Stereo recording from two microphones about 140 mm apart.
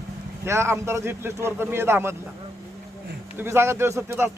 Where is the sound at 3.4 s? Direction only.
15° right (ahead or behind).